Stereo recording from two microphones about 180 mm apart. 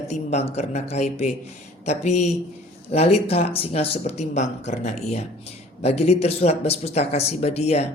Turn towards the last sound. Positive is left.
turn(degrees=35)  # may be behind; listen again after turning